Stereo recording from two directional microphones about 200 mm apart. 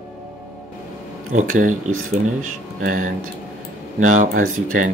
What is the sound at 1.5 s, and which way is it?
Speech, 40° right (ahead or behind).